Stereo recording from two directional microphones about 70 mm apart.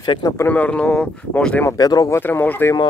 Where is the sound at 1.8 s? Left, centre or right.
Left.